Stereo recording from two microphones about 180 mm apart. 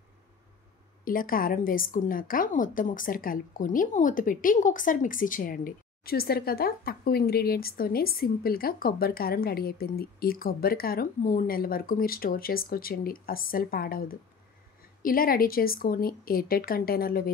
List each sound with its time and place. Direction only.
1.0 s a woman's voice: 50° left (ahead or behind)